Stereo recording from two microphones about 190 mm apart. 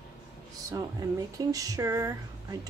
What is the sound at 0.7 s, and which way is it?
Speech, 20° right (ahead or behind).